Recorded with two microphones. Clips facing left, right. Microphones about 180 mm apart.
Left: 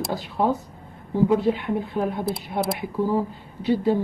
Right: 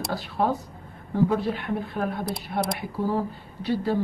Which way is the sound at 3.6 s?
15° left (ahead or behind).